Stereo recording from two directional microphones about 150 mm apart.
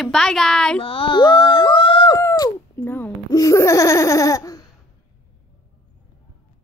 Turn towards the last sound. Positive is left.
turn(degrees=25)  # may be behind; listen again after turning